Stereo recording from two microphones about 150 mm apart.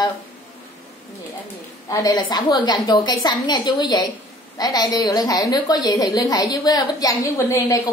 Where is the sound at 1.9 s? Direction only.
25° left (ahead or behind).